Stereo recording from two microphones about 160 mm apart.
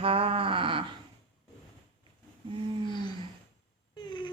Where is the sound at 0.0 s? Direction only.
35° right (ahead or behind).